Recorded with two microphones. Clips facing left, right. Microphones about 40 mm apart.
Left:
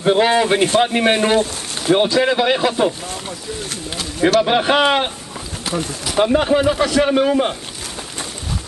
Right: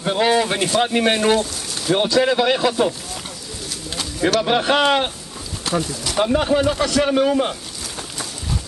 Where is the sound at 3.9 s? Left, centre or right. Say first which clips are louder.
Left 4 dB; centre.